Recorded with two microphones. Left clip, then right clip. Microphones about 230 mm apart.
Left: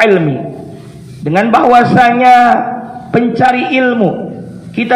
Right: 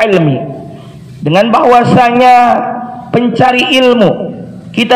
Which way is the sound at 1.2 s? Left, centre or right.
Right.